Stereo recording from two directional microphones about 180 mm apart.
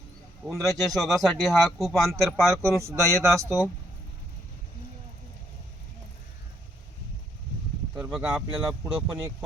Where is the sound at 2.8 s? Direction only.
15° right (ahead or behind).